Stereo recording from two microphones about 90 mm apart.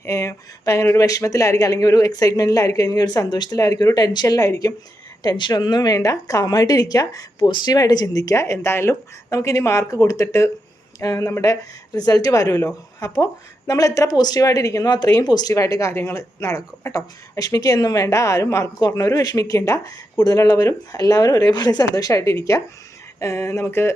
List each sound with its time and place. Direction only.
0.0 s speech: 30° left (ahead or behind)
7.3 s speech: 55° left (ahead or behind)
15.5 s speech: 35° left (ahead or behind)
20.1 s speech: 45° left (ahead or behind); by 23.9 s 30° left (ahead or behind)